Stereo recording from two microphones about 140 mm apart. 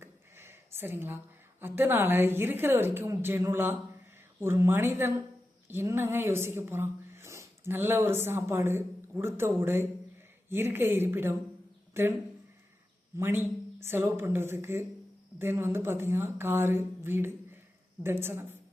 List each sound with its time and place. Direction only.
0.0 s a sound: 15° right (ahead or behind)
1.6 s a woman's voice: 15° right (ahead or behind)
13.1 s a woman's voice: 15° right (ahead or behind)